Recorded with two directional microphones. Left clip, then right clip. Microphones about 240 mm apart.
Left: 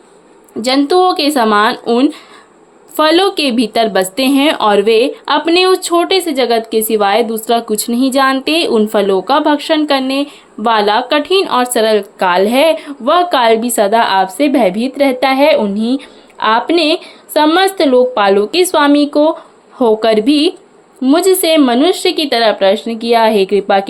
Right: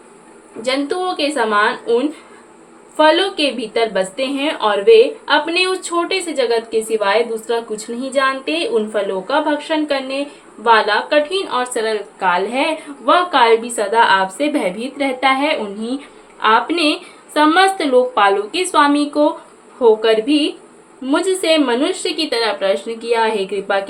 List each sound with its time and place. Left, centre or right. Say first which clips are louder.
0.6 s a woman's voice: left 9 dB; left